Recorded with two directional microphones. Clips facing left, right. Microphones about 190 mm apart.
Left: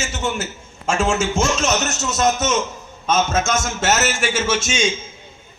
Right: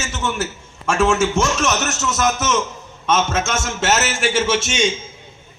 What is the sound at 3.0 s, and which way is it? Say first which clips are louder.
Speech: even; 90° right.